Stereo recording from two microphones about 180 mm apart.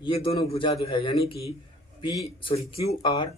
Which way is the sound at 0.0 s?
30° left (ahead or behind).